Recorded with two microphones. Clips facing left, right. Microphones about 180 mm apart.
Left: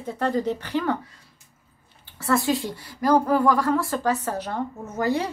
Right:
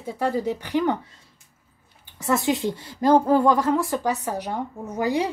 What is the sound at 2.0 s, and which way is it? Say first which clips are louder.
A woman's voice: even; 15° right (ahead or behind).